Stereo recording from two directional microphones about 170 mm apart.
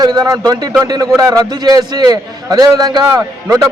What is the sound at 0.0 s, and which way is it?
A man's voice, 25° right (ahead or behind).